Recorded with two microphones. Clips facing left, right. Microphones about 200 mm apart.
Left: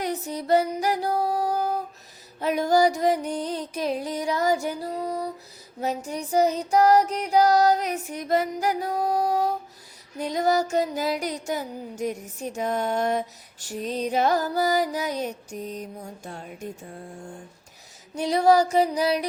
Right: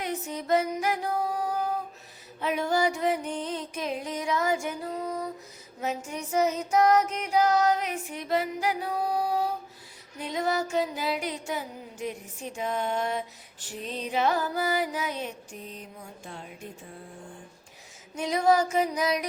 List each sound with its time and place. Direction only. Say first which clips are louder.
0.0 s music: left 4 dB; 35° left (ahead or behind)
18.1 s music: left 4 dB; 35° left (ahead or behind)